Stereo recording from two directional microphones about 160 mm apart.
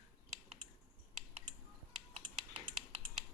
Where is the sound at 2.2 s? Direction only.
55° left (ahead or behind).